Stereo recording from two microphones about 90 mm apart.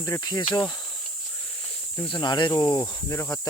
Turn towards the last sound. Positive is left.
turn(degrees=35)  # may be behind; listen again after turning